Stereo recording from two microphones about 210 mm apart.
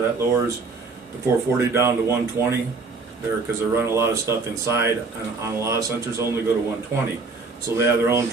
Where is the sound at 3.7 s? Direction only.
10° right (ahead or behind).